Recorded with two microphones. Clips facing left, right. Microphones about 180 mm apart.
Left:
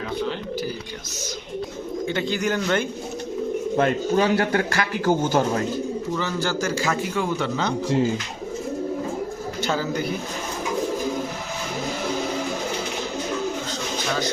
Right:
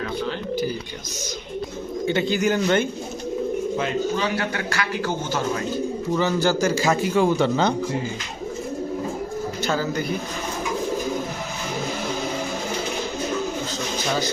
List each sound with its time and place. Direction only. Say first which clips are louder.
2.1 s speech: right 4 dB; 5° right (ahead or behind)
3.8 s a man's voice: left 3 dB; 50° left (ahead or behind)
6.1 s a man's voice: right 8 dB; 15° right (ahead or behind)
7.2 s a man's voice: right 5 dB; 30° right (ahead or behind)
9.6 s speech: even; 10° left (ahead or behind)